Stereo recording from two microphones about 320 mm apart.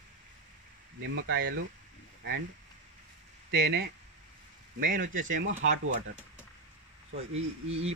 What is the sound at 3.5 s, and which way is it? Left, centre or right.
Speech, right.